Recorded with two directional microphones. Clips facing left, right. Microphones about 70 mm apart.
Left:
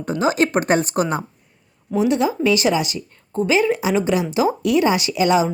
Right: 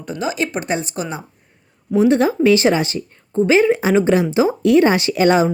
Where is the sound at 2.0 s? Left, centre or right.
Right.